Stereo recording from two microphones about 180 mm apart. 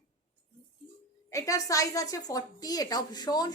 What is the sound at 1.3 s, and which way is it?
A woman's voice, 15° left (ahead or behind).